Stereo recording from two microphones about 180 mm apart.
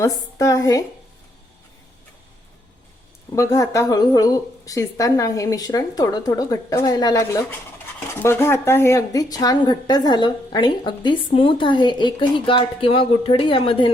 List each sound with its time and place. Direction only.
0.0 s a woman's voice: 15° left (ahead or behind)
3.3 s speech: 15° left (ahead or behind)